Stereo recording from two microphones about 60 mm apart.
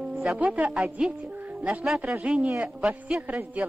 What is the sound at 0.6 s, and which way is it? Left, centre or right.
Speech, right.